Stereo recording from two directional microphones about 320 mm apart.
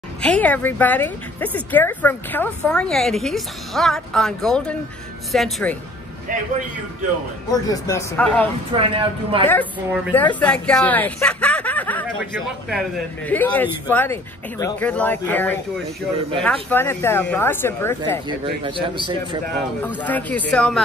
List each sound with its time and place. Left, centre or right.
0.2 s speech: centre
7.5 s speech: centre
8.7 s a man's voice: centre
9.5 s speech: centre
16.6 s speech: centre
18.4 s a man's voice: centre
19.8 s speech: centre